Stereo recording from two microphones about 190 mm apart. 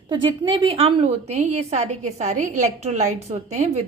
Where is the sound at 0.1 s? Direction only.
25° right (ahead or behind).